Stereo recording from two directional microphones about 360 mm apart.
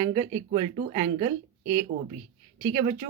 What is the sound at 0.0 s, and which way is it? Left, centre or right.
Speech, centre.